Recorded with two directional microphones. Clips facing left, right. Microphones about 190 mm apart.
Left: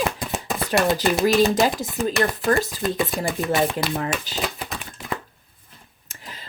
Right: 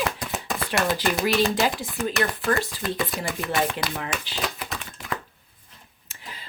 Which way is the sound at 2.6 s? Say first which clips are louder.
Left 5 dB; 40° left (ahead or behind).